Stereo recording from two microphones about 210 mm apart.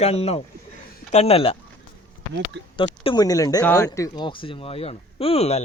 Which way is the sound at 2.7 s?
25° left (ahead or behind).